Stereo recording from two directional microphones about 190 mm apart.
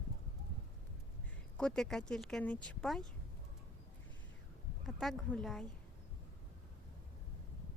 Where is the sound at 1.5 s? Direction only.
5° left (ahead or behind).